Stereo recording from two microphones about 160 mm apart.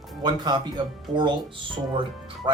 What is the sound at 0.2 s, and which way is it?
Speech, 25° right (ahead or behind).